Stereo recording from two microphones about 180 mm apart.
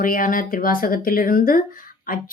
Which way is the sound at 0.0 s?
50° left (ahead or behind).